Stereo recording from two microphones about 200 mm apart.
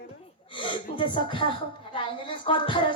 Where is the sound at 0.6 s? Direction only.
25° left (ahead or behind).